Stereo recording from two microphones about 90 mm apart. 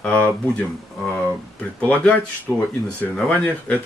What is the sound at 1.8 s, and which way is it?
Speech, 15° left (ahead or behind).